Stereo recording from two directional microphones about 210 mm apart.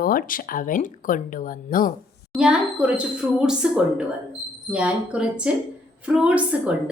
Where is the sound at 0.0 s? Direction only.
45° left (ahead or behind).